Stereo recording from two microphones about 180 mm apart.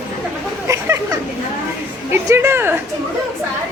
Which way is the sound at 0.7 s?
15° right (ahead or behind).